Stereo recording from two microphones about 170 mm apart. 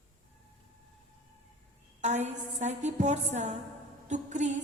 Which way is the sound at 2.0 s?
45° right (ahead or behind).